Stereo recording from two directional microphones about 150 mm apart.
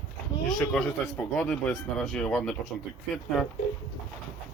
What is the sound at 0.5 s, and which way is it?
Speech, 5° left (ahead or behind).